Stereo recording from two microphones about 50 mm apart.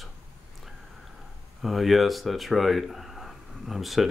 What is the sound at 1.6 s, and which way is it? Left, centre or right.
Speech, centre.